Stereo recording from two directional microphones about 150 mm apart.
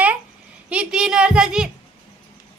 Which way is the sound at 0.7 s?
5° right (ahead or behind).